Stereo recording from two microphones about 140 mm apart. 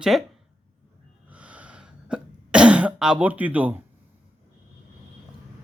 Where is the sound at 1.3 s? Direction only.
10° right (ahead or behind).